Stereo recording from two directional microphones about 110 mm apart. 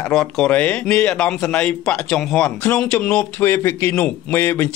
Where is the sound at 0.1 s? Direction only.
5° left (ahead or behind).